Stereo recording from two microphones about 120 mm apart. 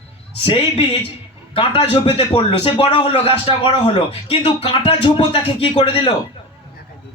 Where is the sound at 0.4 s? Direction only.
50° left (ahead or behind).